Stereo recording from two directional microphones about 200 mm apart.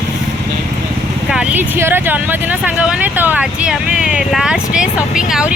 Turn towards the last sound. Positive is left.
turn(degrees=-5)  # may be behind; listen again after turning